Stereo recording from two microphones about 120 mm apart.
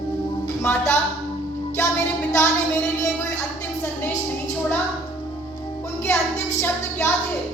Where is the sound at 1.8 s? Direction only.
25° left (ahead or behind).